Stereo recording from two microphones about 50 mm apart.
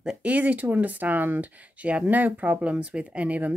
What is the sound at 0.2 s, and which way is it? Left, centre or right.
Speech, right.